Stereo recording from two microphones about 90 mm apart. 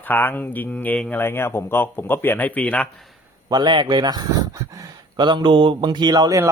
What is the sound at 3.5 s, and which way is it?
A man's voice, 55° right (ahead or behind).